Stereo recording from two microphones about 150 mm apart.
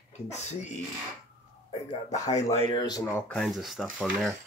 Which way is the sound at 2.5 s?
35° left (ahead or behind).